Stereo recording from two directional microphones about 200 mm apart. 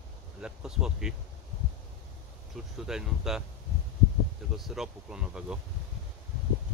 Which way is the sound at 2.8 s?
Centre (ahead or behind).